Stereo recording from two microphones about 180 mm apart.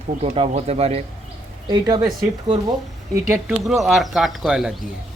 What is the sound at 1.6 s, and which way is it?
Speech, 20° right (ahead or behind).